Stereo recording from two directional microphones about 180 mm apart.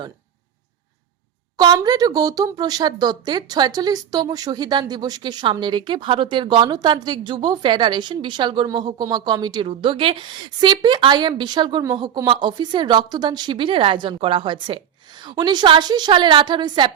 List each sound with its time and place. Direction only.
1.5 s speech: 20° right (ahead or behind)